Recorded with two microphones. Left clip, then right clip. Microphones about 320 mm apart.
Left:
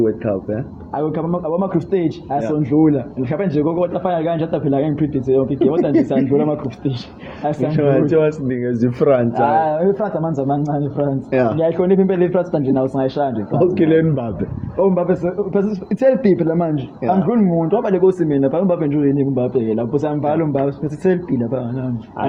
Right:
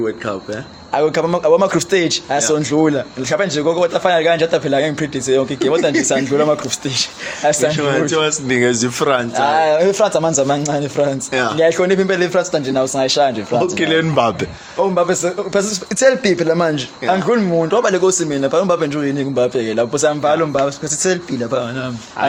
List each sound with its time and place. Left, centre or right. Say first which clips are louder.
0.9 s speech: right 6 dB; right
7.8 s a man's voice: left 1 dB; centre
8.4 s a man's voice: right 5 dB; right; by 9.2 s centre
9.3 s speech: right 2 dB; right
11.3 s a man's voice: left 1 dB; centre
11.6 s a man's voice: right 2 dB; right
13.7 s a man's voice: left 3 dB; centre
14.9 s a man's voice: right 2 dB; right